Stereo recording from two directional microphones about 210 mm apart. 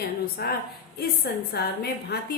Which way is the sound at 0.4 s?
45° left (ahead or behind).